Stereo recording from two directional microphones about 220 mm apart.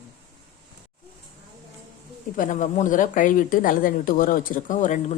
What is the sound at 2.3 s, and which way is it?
Speech, 35° left (ahead or behind).